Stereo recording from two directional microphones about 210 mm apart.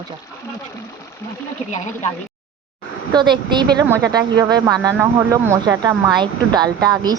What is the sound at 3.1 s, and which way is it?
Speech, 20° right (ahead or behind).